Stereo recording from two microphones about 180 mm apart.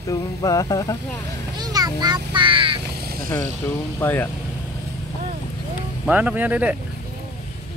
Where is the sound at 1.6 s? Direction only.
20° right (ahead or behind).